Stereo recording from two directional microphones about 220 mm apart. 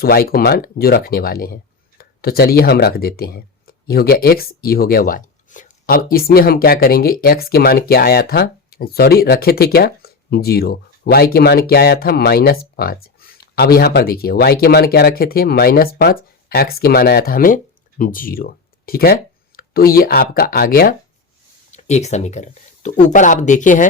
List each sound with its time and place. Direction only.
0.0 s speech: 45° left (ahead or behind)
21.7 s speech: 30° left (ahead or behind)